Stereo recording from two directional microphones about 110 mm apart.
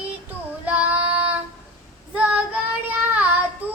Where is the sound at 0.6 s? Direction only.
15° right (ahead or behind).